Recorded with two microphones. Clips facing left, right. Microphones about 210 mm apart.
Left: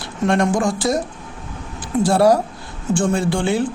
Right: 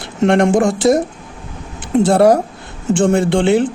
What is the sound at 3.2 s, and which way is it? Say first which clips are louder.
Speech: right 6 dB; 25° right (ahead or behind).